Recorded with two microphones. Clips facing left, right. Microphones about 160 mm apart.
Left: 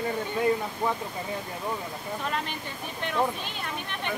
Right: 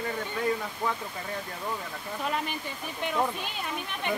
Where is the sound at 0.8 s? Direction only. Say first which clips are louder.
Left 2 dB; 20° left (ahead or behind).